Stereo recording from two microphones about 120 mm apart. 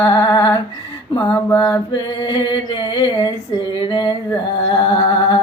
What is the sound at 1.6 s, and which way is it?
Humming, 35° left (ahead or behind).